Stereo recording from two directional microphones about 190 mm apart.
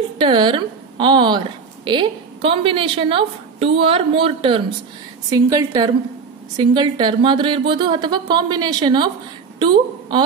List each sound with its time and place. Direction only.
0.2 s a woman's voice: 25° right (ahead or behind)